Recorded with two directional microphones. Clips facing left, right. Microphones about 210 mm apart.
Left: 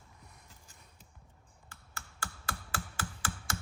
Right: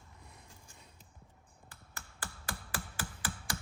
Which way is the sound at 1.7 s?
15° right (ahead or behind).